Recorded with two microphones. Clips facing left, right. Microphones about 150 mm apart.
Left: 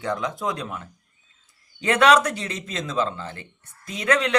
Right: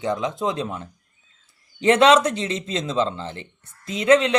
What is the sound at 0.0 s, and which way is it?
Speech, 20° right (ahead or behind).